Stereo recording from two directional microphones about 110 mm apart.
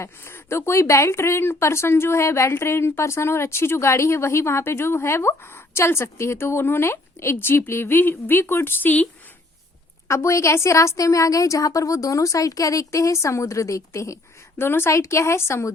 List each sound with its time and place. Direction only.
0.0 s speech: 25° left (ahead or behind)
10.1 s speech: 25° left (ahead or behind)